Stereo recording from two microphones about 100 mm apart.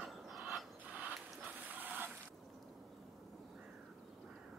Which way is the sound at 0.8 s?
15° right (ahead or behind).